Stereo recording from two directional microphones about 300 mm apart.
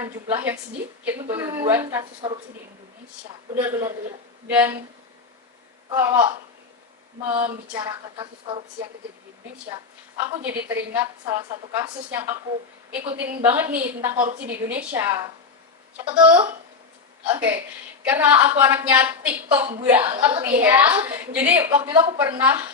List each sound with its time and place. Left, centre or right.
0.0 s a woman's voice: centre
3.6 s a woman's voice: centre
5.9 s a woman's voice: centre
7.7 s a woman's voice: centre
10.2 s a woman's voice: centre